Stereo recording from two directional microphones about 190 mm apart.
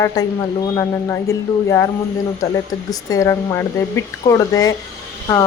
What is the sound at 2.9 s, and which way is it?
Speech, 15° left (ahead or behind).